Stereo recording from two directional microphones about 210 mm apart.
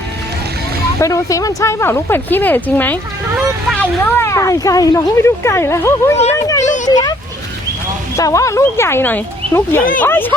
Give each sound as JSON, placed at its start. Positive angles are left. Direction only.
{"t": 1.0, "sound": "speech", "side_deg": 15}
{"t": 6.8, "sound": "a sound", "side_deg": 20}
{"t": 8.1, "sound": "speech", "side_deg": 15}